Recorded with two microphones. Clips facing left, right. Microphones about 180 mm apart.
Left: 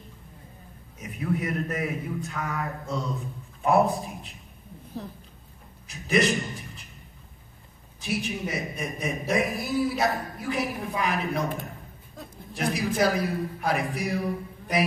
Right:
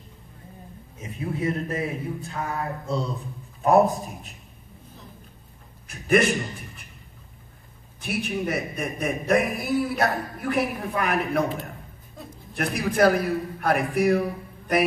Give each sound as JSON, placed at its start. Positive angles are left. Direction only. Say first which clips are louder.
{"t": 0.9, "sound": "a man's voice", "louder": "left 2 dB", "side_deg": -25}
{"t": 5.9, "sound": "a sound", "louder": "right 3 dB", "side_deg": -55}
{"t": 8.0, "sound": "a woman's voice", "louder": "right 2 dB", "side_deg": -60}
{"t": 12.5, "sound": "a woman's voice", "louder": "right 3 dB", "side_deg": -55}